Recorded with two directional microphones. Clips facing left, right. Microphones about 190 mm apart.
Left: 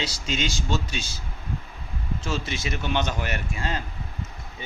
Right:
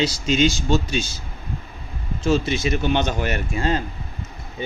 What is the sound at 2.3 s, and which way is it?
Speech, 20° right (ahead or behind).